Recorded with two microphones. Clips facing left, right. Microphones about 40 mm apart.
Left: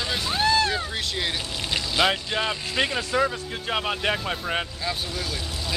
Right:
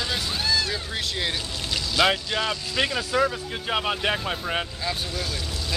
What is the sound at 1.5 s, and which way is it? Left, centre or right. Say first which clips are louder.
Vehicle: left 1 dB; centre.